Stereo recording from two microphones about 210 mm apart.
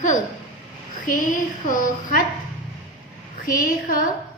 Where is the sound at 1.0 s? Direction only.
40° left (ahead or behind).